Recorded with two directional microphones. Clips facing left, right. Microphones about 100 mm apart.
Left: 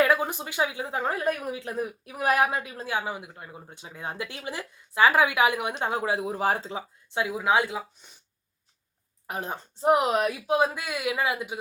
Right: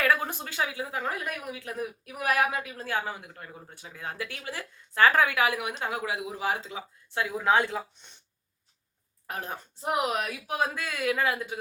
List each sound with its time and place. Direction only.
0.0 s a woman's voice: 20° left (ahead or behind); by 6.8 s 35° left (ahead or behind)
7.1 s speech: 15° left (ahead or behind)
9.2 s a woman's voice: 20° left (ahead or behind)